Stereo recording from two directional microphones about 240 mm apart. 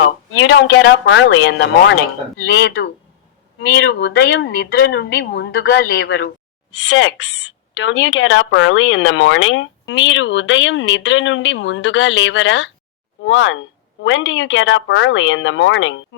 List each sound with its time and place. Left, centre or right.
0.3 s speech: left